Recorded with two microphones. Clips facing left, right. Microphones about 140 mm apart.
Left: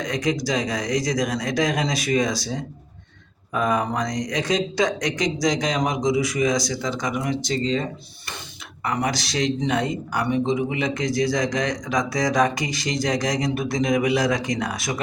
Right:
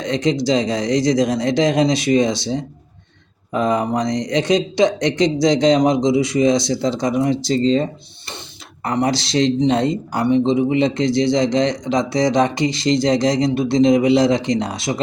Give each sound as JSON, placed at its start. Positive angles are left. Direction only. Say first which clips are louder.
{"t": 0.0, "sound": "speech", "louder": "right 5 dB", "side_deg": -25}